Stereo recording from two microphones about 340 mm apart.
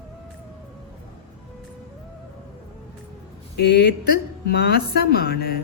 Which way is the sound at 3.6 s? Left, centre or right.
Left.